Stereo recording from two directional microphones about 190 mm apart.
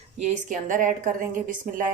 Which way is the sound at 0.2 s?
40° right (ahead or behind).